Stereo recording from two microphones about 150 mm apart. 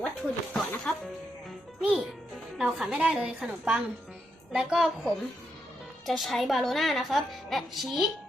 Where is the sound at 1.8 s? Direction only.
5° right (ahead or behind).